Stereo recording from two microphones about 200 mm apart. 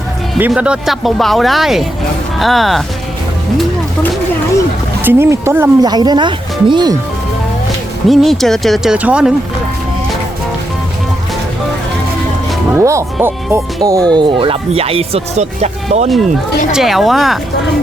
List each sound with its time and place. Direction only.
0.3 s speech: 5° right (ahead or behind)
5.0 s speech: 10° right (ahead or behind)
8.0 s speech: centre (ahead or behind)
12.7 s speech: 15° right (ahead or behind); by 16.0 s 35° right (ahead or behind)
16.7 s speech: centre (ahead or behind)